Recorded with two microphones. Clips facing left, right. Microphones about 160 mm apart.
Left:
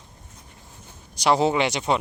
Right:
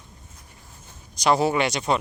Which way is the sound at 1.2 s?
15° left (ahead or behind).